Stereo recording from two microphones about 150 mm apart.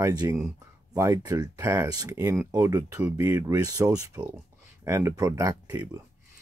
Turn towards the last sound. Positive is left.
turn(degrees=-15)  # may be behind; listen again after turning